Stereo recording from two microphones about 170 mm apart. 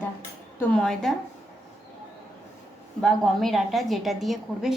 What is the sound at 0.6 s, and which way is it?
Speech, 5° left (ahead or behind).